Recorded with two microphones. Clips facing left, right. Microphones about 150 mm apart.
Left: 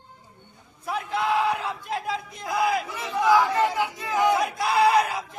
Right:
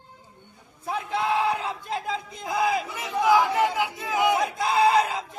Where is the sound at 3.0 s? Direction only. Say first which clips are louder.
Even; 10° right (ahead or behind).